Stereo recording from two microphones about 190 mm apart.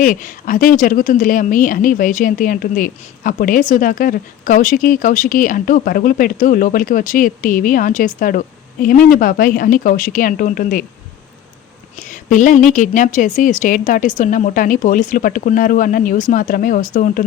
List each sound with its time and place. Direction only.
0.0 s a woman's voice: 45° left (ahead or behind)
12.1 s a woman's voice: 40° left (ahead or behind)